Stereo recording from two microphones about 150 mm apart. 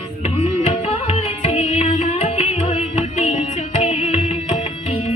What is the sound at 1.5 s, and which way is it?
Music, 45° left (ahead or behind).